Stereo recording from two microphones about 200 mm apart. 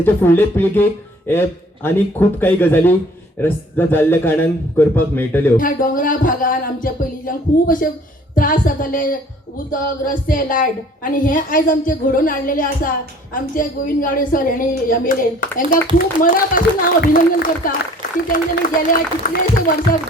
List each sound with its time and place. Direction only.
0.0 s a man's voice: 10° left (ahead or behind)
5.5 s a woman's voice: 40° left (ahead or behind)